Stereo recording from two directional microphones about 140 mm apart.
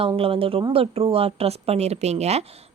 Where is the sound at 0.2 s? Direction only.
40° right (ahead or behind).